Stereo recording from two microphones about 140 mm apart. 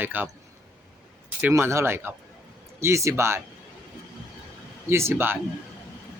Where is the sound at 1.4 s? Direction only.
20° right (ahead or behind).